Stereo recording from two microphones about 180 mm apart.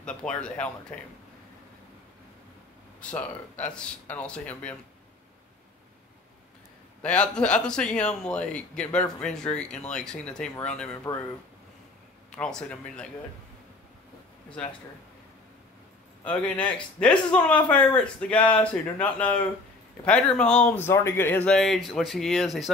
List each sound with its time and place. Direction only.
0.0 s speech: 5° left (ahead or behind)
3.0 s speech: 5° left (ahead or behind)
7.0 s speech: 5° left (ahead or behind)
11.1 s speech: 20° left (ahead or behind)
12.3 s speech: 5° left (ahead or behind)
16.3 s speech: 5° left (ahead or behind)